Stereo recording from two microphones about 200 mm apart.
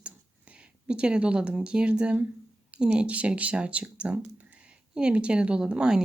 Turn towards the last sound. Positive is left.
turn(degrees=-5)  # may be behind; listen again after turning